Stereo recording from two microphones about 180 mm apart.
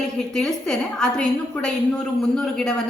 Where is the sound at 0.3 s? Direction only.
5° left (ahead or behind).